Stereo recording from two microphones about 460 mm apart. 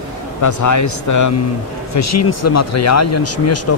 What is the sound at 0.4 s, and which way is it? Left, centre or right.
Speech, left.